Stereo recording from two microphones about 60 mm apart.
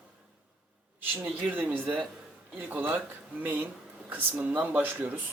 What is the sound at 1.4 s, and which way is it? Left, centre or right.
Speech, right.